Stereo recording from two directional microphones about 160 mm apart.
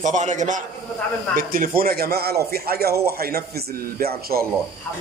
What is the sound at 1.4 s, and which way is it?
A man's voice, 65° right (ahead or behind).